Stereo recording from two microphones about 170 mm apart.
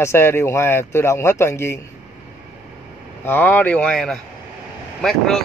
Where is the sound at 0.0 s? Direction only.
15° left (ahead or behind).